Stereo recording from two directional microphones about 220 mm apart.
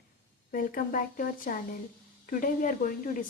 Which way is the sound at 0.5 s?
40° left (ahead or behind).